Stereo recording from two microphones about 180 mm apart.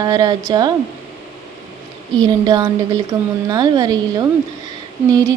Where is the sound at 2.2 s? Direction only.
20° right (ahead or behind).